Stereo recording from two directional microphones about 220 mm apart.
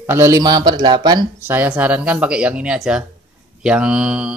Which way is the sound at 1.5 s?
5° right (ahead or behind).